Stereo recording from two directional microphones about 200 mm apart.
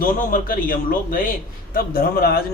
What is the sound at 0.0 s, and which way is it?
A man's voice, 45° left (ahead or behind).